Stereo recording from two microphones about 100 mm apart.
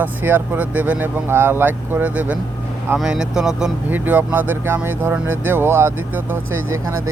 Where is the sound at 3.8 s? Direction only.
20° right (ahead or behind).